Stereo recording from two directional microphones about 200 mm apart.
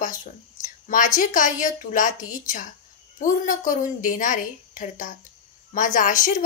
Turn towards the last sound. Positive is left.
turn(degrees=40)  # may be behind; listen again after turning